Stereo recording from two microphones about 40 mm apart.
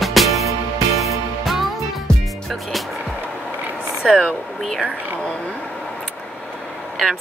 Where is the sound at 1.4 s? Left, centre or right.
Centre.